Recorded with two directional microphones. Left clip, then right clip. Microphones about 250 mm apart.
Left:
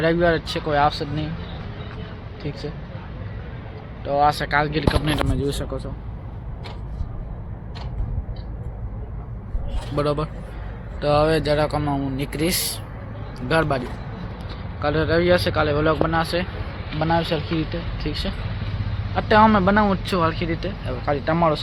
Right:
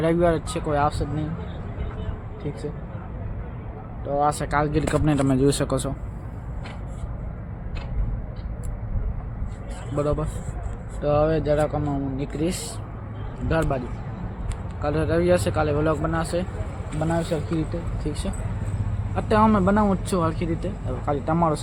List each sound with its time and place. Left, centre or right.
0.0 s speech: centre
4.0 s speech: centre; by 5.2 s right
5.3 s speech: right
9.9 s speech: centre